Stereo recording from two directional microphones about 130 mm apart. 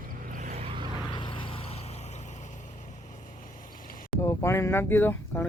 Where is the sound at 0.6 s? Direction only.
40° right (ahead or behind).